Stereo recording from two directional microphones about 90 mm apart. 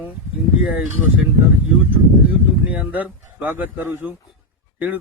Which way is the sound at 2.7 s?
15° right (ahead or behind).